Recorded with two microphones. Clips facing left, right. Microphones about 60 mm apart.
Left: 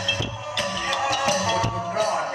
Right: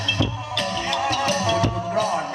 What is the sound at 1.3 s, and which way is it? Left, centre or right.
Music, right.